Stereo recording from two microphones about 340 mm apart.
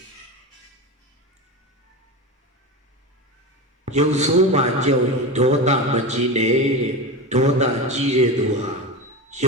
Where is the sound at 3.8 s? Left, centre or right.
Centre.